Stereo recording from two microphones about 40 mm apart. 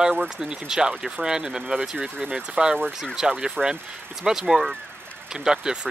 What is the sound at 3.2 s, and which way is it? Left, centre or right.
Speech, centre.